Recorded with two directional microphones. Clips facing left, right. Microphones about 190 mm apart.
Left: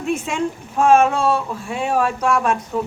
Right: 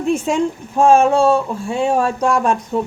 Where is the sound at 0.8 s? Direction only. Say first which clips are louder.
Right 3 dB; 30° right (ahead or behind).